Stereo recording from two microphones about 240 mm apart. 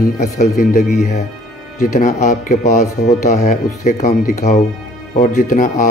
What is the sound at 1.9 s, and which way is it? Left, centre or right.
Speech, left.